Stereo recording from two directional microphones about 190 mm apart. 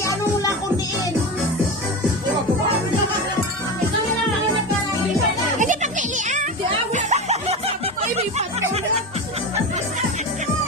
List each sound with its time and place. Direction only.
5.5 s music: 40° right (ahead or behind)
6.9 s snicker: 35° right (ahead or behind)